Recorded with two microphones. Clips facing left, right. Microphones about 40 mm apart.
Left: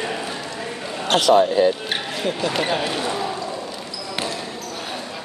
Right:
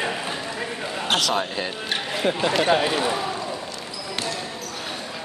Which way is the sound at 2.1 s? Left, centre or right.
Centre.